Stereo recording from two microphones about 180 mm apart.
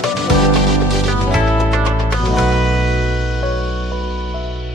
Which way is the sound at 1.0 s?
Centre (ahead or behind).